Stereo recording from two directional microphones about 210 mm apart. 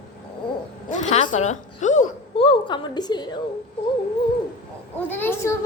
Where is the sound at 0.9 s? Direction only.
35° left (ahead or behind).